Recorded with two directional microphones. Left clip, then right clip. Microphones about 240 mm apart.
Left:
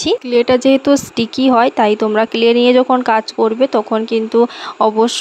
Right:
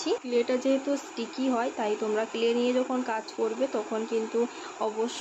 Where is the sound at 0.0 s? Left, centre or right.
Left.